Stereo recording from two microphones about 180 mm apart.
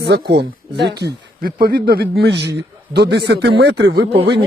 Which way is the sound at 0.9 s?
60° right (ahead or behind).